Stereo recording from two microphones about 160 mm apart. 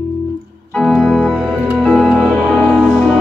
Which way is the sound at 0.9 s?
Centre (ahead or behind).